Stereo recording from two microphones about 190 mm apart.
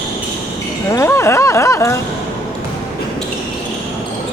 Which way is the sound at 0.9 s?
15° left (ahead or behind).